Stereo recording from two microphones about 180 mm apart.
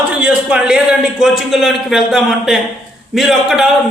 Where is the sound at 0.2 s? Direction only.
5° right (ahead or behind).